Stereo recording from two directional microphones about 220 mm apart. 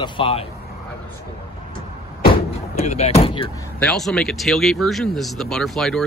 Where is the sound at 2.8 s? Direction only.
30° left (ahead or behind).